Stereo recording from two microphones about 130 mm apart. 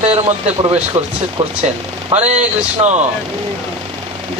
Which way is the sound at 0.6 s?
45° right (ahead or behind).